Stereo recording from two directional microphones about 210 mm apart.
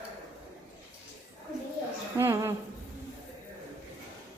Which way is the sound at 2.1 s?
15° right (ahead or behind).